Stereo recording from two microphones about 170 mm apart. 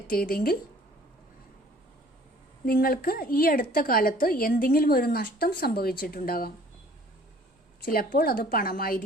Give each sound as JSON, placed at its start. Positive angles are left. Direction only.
{"t": 0.1, "sound": "a woman's voice", "side_deg": 60}
{"t": 2.6, "sound": "a woman's voice", "side_deg": 60}
{"t": 7.9, "sound": "a woman's voice", "side_deg": 60}